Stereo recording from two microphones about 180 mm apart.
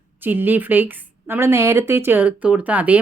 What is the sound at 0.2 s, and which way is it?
Speech, 10° right (ahead or behind).